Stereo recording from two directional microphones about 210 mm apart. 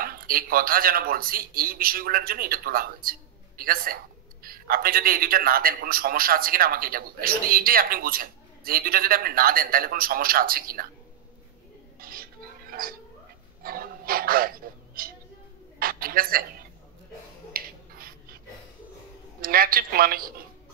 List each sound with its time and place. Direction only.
0.0 s speech: 45° right (ahead or behind)
12.0 s a sound: 45° right (ahead or behind)
13.6 s dog: 45° right (ahead or behind)
15.0 s a sound: 45° right (ahead or behind)
17.5 s finger snapping: 45° right (ahead or behind)
19.4 s speech: 45° right (ahead or behind)